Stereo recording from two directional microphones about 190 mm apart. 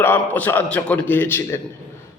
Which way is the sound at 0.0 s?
10° left (ahead or behind).